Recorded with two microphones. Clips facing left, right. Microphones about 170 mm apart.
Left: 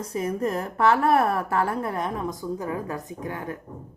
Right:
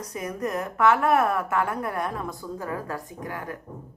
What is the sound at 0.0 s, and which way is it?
A woman's voice, 30° left (ahead or behind).